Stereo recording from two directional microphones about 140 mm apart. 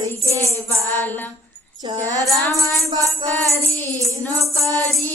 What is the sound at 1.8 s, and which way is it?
Music, 35° right (ahead or behind).